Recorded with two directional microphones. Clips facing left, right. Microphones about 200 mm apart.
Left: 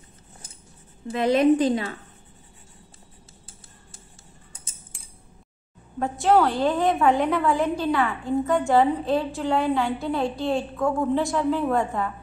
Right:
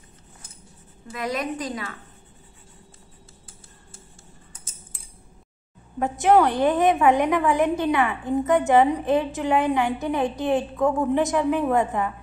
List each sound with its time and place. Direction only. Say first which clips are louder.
1.1 s a woman's voice: left 10 dB; 30° left (ahead or behind)
5.9 s a woman's voice: right 2 dB; 20° right (ahead or behind)